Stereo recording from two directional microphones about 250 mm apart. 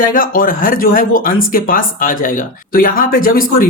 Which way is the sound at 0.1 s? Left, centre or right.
Left.